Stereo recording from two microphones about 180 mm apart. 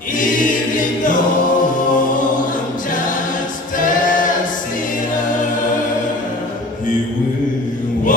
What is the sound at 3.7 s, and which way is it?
A capella, 45° left (ahead or behind).